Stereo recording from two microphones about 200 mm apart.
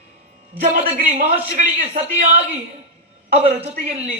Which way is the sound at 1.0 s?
40° right (ahead or behind).